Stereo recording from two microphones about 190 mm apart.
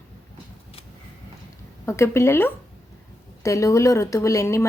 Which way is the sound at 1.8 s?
15° left (ahead or behind).